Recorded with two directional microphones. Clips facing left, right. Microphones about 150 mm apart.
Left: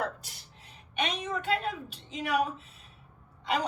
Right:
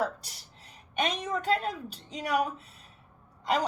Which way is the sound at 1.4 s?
40° right (ahead or behind).